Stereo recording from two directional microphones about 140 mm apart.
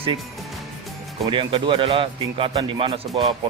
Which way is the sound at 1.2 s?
40° right (ahead or behind).